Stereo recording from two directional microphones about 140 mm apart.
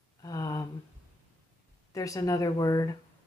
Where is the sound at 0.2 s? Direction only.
25° left (ahead or behind).